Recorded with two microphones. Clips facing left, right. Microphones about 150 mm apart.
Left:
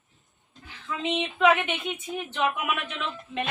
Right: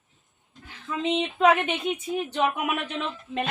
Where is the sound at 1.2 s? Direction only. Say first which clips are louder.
Right 1 dB; 35° right (ahead or behind).